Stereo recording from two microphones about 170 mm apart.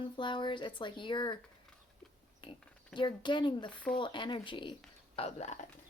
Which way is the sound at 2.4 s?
25° left (ahead or behind).